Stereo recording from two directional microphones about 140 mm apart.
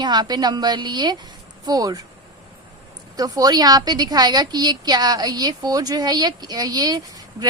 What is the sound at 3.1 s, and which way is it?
A woman's voice, 25° right (ahead or behind).